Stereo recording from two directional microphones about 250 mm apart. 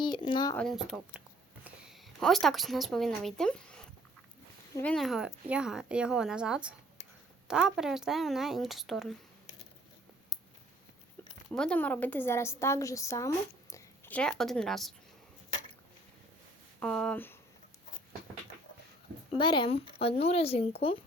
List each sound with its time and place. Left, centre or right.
0.0 s speech: centre
0.5 s a woman's voice: centre
4.8 s speech: centre
11.5 s a woman's voice: centre
16.8 s speech: centre
19.4 s speech: centre